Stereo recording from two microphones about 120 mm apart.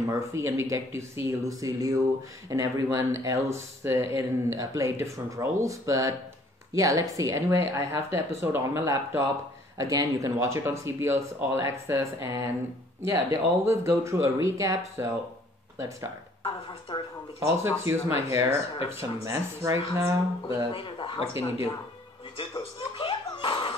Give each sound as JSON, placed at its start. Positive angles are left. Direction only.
{"t": 0.1, "sound": "speech", "side_deg": -25}
{"t": 16.9, "sound": "speech", "side_deg": 45}
{"t": 17.4, "sound": "speech", "side_deg": -20}
{"t": 20.4, "sound": "speech", "side_deg": 45}
{"t": 22.6, "sound": "laughter", "side_deg": 45}